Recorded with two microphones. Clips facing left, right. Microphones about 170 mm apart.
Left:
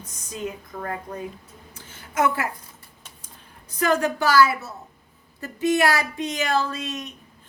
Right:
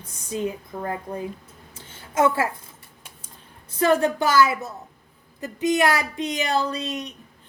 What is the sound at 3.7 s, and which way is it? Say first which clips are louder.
Speech: right 2 dB; 25° right (ahead or behind).